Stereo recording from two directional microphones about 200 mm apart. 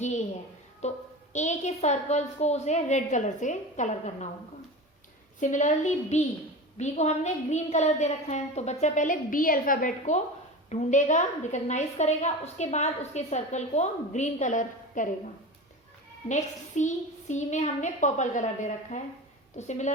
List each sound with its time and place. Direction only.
0.0 s a woman's voice: 35° left (ahead or behind)
5.4 s a woman's voice: 40° left (ahead or behind)
16.3 s a woman's voice: 35° left (ahead or behind)